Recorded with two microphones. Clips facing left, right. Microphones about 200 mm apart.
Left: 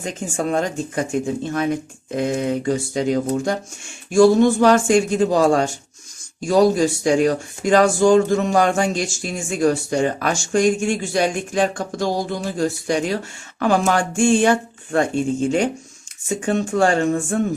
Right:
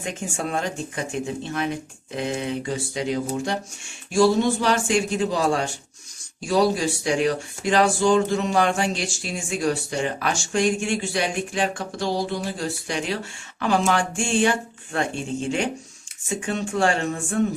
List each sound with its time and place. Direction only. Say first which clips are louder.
0.0 s speech: left 5 dB; 40° left (ahead or behind)